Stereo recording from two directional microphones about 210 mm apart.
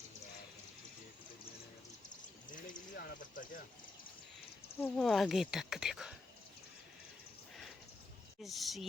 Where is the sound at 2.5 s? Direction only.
40° left (ahead or behind).